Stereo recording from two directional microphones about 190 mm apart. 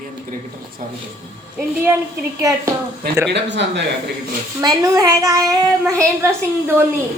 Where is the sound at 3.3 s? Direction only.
65° right (ahead or behind).